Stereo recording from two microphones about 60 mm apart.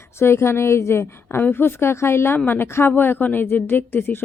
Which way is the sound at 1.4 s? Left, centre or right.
Left.